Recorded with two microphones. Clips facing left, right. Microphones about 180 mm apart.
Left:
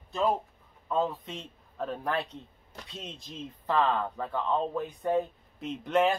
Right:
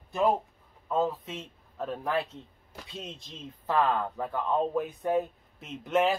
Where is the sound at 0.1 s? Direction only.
15° right (ahead or behind).